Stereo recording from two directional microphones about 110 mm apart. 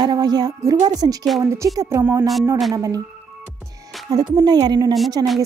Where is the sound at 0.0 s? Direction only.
40° right (ahead or behind).